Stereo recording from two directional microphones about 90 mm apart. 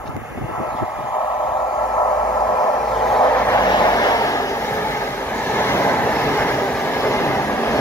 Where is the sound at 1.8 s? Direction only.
50° left (ahead or behind).